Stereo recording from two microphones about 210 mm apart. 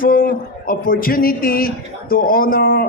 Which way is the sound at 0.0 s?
45° left (ahead or behind).